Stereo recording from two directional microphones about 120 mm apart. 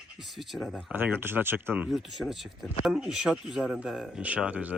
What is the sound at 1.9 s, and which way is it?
Speech, centre (ahead or behind).